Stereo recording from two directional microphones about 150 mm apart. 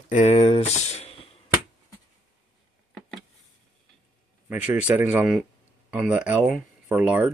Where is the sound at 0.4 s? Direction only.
45° left (ahead or behind).